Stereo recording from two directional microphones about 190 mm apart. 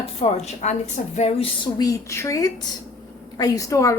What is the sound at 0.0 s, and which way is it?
A woman's voice, 30° left (ahead or behind).